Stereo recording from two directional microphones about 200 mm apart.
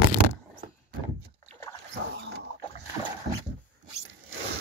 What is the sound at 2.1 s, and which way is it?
Dog, 65° right (ahead or behind).